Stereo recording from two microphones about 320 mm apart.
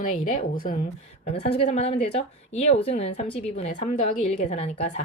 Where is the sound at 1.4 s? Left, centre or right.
Left.